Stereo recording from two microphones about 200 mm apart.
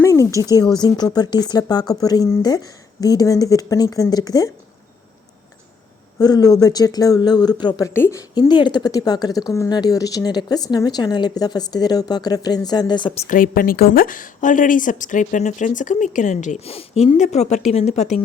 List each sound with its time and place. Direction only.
0.0 s a sound: 15° left (ahead or behind)
0.3 s speech: 15° right (ahead or behind)
0.7 s speech: 20° left (ahead or behind)
6.1 s speech: 20° left (ahead or behind)
13.2 s a woman's voice: 45° left (ahead or behind)